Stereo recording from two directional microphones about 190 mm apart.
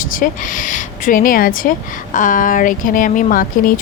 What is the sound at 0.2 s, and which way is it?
A woman's voice, 40° left (ahead or behind).